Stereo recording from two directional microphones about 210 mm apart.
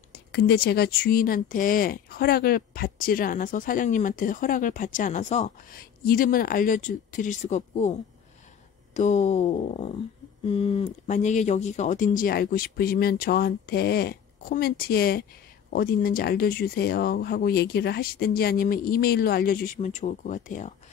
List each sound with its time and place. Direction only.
0.1 s speech: 50° left (ahead or behind)